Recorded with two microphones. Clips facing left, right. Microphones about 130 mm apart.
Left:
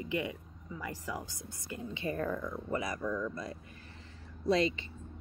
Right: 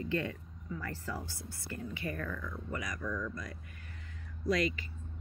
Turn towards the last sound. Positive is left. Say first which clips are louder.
# left 3 dB
turn(degrees=25)  # may be behind; listen again after turning